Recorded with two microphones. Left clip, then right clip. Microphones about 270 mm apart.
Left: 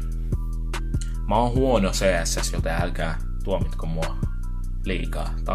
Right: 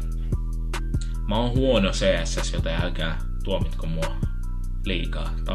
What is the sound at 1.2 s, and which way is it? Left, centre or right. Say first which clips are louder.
Speech: left 3 dB; left.